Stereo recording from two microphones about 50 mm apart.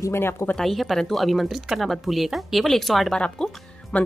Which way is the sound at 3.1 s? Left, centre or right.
Centre.